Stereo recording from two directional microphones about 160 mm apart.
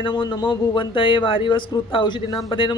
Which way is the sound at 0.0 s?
25° left (ahead or behind).